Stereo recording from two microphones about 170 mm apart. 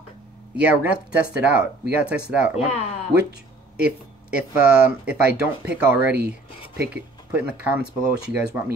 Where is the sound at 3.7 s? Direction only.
5° right (ahead or behind).